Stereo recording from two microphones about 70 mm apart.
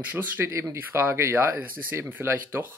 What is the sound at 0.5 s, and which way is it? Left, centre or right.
Speech, right.